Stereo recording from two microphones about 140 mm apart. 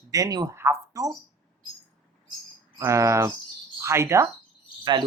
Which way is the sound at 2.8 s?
20° right (ahead or behind).